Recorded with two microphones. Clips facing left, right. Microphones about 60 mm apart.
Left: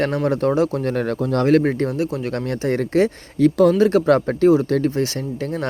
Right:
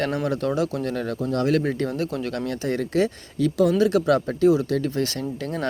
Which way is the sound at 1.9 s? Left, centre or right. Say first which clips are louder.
Left 4 dB; left.